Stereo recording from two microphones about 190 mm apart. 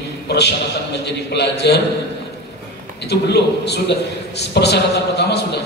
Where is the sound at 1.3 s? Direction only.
60° left (ahead or behind).